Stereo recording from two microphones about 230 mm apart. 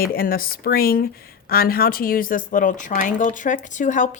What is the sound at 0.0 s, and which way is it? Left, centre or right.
Speech, left.